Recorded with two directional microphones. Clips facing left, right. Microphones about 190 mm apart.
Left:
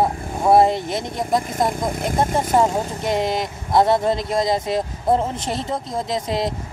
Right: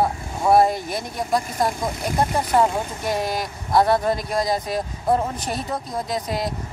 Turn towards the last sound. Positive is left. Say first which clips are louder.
# left 3 dB
turn(degrees=25)  # may be behind; listen again after turning